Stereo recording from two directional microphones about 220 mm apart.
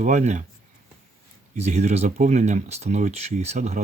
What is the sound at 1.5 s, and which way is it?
Speech, 30° right (ahead or behind).